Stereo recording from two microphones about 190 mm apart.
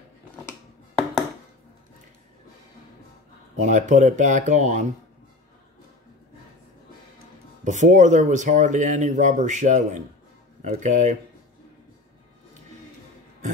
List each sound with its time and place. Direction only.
3.6 s speech: 40° right (ahead or behind)
7.6 s speech: 40° right (ahead or behind)